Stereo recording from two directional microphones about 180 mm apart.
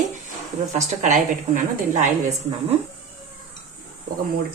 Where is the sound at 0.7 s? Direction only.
40° right (ahead or behind).